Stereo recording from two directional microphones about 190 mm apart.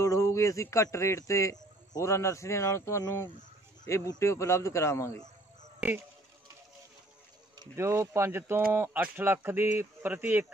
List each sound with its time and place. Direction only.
0.0 s a man's voice: 15° left (ahead or behind)
5.8 s speech: 10° right (ahead or behind)
7.5 s speech: 15° right (ahead or behind)